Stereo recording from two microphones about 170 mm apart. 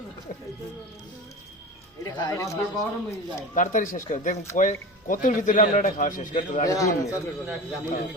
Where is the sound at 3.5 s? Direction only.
50° left (ahead or behind).